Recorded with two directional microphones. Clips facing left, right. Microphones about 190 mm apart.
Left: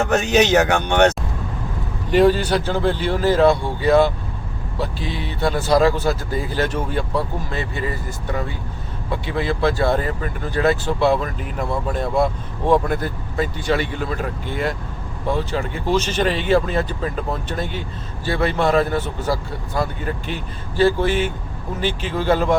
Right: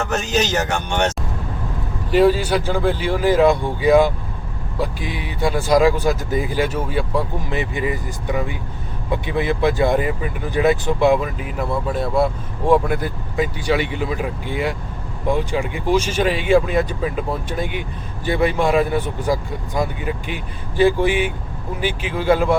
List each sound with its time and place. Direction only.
0.1 s speech: 65° left (ahead or behind)
2.0 s speech: 5° right (ahead or behind)